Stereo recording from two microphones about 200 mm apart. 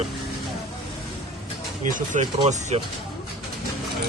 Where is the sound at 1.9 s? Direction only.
40° right (ahead or behind).